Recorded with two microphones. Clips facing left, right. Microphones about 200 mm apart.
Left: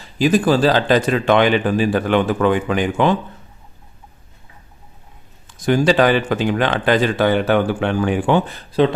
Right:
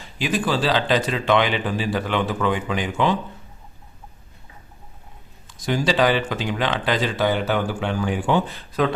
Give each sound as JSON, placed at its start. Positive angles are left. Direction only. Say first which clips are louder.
{"t": 0.2, "sound": "speech", "louder": "left 8 dB", "side_deg": 40}
{"t": 5.6, "sound": "speech", "louder": "left 5 dB", "side_deg": 55}